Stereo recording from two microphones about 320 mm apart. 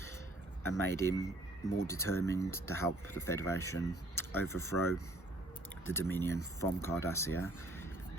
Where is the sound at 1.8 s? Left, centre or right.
Centre.